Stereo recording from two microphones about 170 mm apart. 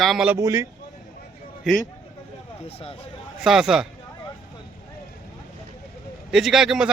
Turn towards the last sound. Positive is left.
turn(degrees=-5)  # may be behind; listen again after turning